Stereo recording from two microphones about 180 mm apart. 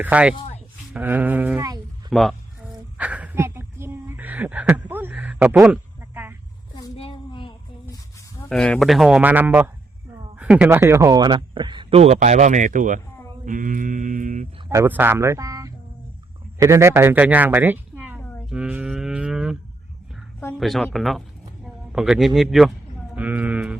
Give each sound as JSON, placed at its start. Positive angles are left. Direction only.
{"t": 0.0, "sound": "speech", "side_deg": -5}
{"t": 2.0, "sound": "a sound", "side_deg": 0}
{"t": 6.9, "sound": "a sound", "side_deg": 30}
{"t": 8.4, "sound": "a man's voice", "side_deg": 5}
{"t": 13.4, "sound": "mantra", "side_deg": -45}
{"t": 14.7, "sound": "speech", "side_deg": -15}
{"t": 18.2, "sound": "a sound", "side_deg": 10}
{"t": 18.4, "sound": "cattle", "side_deg": -5}
{"t": 20.6, "sound": "speech", "side_deg": 0}